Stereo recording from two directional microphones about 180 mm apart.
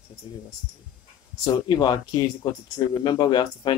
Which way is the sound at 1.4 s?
20° left (ahead or behind).